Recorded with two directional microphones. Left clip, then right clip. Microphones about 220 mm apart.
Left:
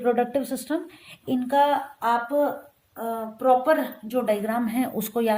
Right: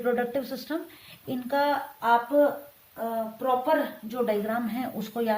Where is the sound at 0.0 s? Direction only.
25° left (ahead or behind).